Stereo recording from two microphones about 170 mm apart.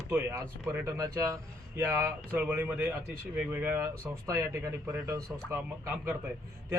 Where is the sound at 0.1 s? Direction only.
15° right (ahead or behind).